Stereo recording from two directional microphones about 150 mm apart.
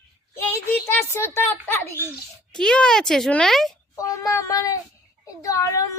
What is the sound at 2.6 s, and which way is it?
Speech, 5° left (ahead or behind).